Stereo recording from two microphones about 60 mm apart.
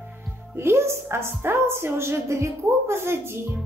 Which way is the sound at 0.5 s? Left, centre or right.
Right.